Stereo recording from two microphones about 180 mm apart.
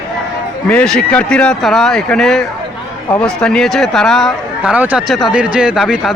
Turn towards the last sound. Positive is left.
turn(degrees=0)  # may be behind; listen again after turning